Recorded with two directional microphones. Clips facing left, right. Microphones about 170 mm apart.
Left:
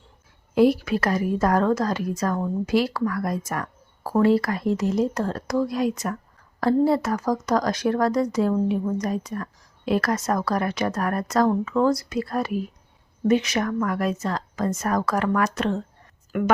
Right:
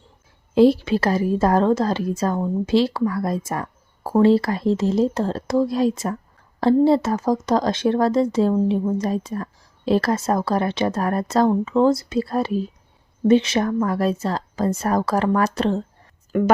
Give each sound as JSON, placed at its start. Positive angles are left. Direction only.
{"t": 0.5, "sound": "a woman's voice", "side_deg": -25}